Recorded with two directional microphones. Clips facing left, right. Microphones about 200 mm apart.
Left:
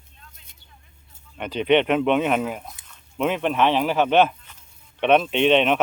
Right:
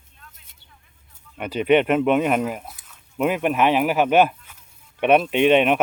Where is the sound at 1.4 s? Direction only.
5° right (ahead or behind).